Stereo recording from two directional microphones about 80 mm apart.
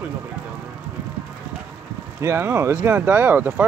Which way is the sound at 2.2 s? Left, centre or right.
Right.